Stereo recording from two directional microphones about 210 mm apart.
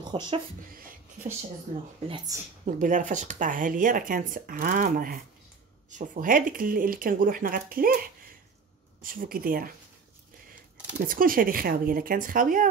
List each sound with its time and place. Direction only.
0.1 s speech: 25° right (ahead or behind)
2.0 s speech: 20° right (ahead or behind)
2.6 s speech: 35° right (ahead or behind)
11.1 s speech: 40° right (ahead or behind)